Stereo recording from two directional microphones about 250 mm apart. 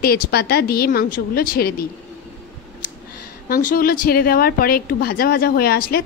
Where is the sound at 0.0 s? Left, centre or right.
Left.